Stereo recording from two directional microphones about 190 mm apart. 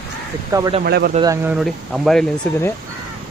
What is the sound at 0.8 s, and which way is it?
Speech, 55° right (ahead or behind).